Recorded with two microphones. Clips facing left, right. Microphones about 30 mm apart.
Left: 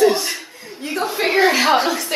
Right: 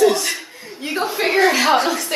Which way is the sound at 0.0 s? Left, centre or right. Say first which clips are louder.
Even; centre.